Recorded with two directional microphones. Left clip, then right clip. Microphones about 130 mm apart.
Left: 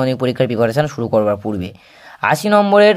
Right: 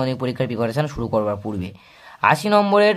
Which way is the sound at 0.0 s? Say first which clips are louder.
Left 7 dB; 35° left (ahead or behind).